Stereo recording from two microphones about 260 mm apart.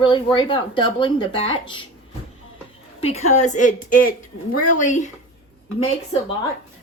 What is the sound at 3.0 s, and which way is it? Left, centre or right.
Speech, left.